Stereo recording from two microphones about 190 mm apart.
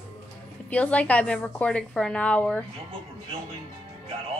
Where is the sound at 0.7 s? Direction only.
5° left (ahead or behind).